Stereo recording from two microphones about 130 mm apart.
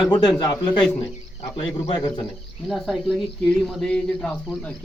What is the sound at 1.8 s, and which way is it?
Speech, 40° left (ahead or behind).